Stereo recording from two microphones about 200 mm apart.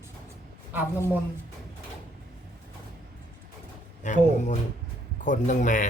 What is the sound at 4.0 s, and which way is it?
Speech, 35° left (ahead or behind).